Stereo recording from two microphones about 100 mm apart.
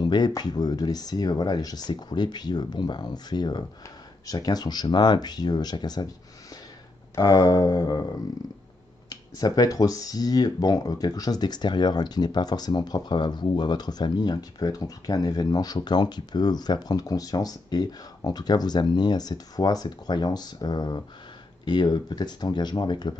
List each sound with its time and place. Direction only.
0.0 s a sound: 45° left (ahead or behind)
0.3 s speech: 40° left (ahead or behind)
7.2 s mantra: 40° left (ahead or behind)
9.1 s speech: 40° left (ahead or behind)